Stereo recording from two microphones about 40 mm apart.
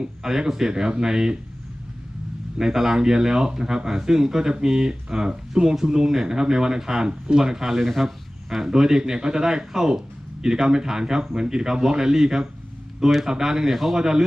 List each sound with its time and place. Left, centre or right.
0.0 s speech: centre
2.6 s speech: centre
7.8 s speech: centre
8.4 s speech: centre
13.7 s speech: centre
14.0 s speech: centre